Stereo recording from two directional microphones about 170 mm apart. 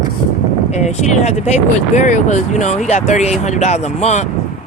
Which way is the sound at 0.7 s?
40° left (ahead or behind).